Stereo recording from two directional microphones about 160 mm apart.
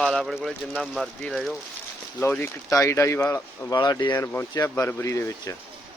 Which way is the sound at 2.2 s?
15° left (ahead or behind).